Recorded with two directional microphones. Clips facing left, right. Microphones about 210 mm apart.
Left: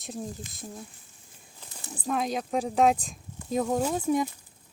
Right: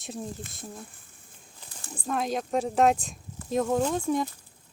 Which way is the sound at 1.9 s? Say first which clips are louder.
Even; centre (ahead or behind).